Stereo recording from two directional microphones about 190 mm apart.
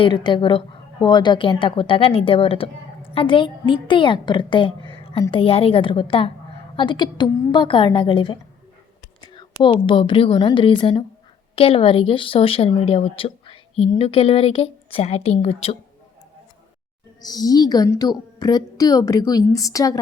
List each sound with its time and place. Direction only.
0.0 s a woman's voice: 25° left (ahead or behind)
9.2 s whispering: 25° left (ahead or behind)
9.8 s a woman's voice: 25° left (ahead or behind)
17.2 s a woman's voice: 20° left (ahead or behind)